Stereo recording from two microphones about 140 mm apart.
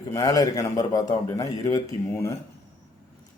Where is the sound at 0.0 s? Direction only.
25° left (ahead or behind).